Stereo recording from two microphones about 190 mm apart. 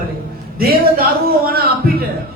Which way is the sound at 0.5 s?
55° right (ahead or behind).